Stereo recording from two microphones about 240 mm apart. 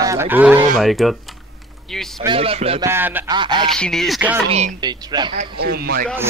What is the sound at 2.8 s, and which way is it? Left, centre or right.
Speech, centre.